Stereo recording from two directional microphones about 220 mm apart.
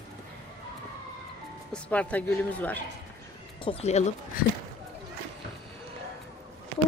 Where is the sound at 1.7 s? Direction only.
5° left (ahead or behind).